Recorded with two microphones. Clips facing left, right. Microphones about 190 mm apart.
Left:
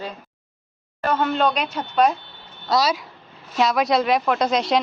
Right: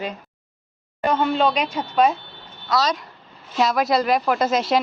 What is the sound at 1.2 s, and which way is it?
Speech, centre (ahead or behind).